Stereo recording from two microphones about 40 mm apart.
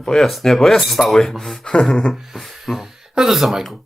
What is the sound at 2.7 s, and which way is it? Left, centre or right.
Speech, centre.